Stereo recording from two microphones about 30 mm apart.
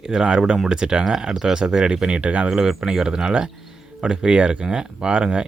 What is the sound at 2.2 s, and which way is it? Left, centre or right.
Speech, right.